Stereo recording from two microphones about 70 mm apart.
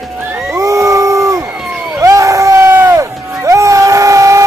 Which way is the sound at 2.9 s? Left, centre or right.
Right.